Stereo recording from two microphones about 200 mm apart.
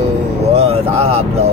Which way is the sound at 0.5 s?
30° right (ahead or behind).